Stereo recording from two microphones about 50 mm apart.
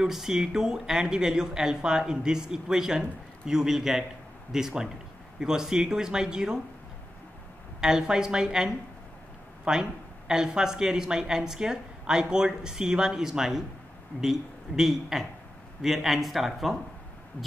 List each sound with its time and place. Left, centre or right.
0.0 s a woman's voice: centre
7.8 s a woman's voice: centre
17.4 s speech: left